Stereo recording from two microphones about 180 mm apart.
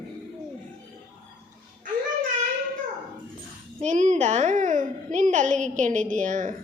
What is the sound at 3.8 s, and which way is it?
A child's voice, 40° right (ahead or behind).